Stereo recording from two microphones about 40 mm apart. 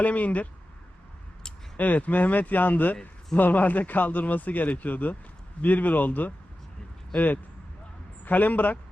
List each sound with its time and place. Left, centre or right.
0.0 s speech: left
1.7 s speech: left
8.2 s speech: left